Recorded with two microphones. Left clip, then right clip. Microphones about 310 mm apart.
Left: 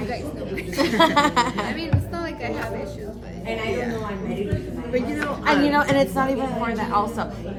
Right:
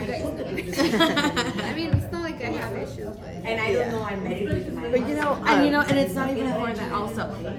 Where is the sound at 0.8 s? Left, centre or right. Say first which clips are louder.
Left 4 dB; centre.